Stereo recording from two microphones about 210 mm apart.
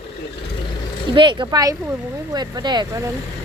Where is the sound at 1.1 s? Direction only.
20° right (ahead or behind).